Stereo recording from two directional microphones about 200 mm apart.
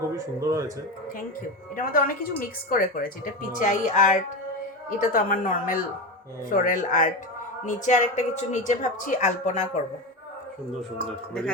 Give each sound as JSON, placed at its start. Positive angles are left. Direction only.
{"t": 0.3, "sound": "speech", "side_deg": -15}
{"t": 1.7, "sound": "a woman's voice", "side_deg": 45}